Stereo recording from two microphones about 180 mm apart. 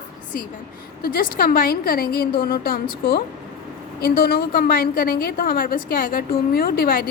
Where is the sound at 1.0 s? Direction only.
55° left (ahead or behind).